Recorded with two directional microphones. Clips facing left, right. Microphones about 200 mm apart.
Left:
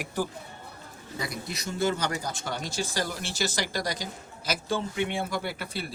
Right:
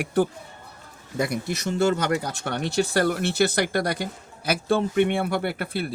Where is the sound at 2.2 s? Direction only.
60° right (ahead or behind).